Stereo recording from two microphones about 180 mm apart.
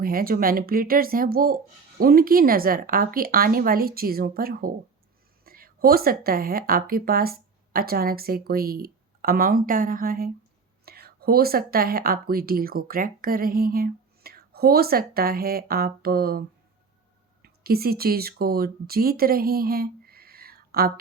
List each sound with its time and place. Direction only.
0.0 s a woman's voice: 55° right (ahead or behind)
17.4 s speech: 60° right (ahead or behind)